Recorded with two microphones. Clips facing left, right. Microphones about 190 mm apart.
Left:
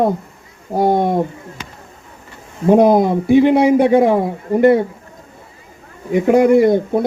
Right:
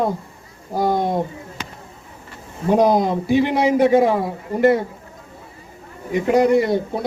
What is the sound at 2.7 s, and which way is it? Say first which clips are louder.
A man's voice: left 4 dB; 55° left (ahead or behind).